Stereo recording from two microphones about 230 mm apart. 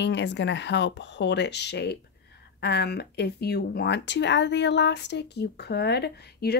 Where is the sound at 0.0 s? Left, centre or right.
Left.